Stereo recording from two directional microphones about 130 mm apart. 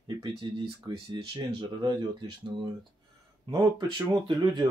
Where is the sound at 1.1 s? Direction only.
35° right (ahead or behind).